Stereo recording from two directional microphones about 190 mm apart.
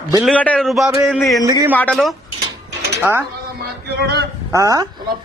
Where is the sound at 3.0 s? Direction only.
10° right (ahead or behind).